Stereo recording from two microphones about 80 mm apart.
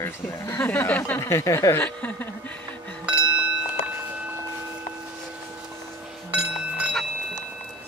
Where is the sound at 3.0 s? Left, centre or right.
Centre.